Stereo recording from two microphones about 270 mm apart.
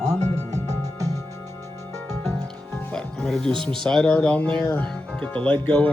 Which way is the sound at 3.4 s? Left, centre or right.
Centre.